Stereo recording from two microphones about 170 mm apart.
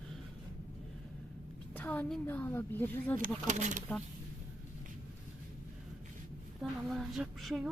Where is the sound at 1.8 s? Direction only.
10° left (ahead or behind).